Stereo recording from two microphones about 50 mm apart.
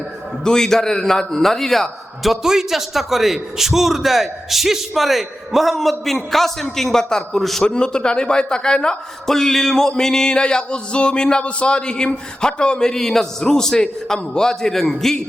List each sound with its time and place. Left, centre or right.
0.4 s a man's voice: centre